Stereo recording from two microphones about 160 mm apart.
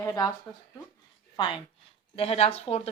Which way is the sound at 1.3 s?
30° left (ahead or behind).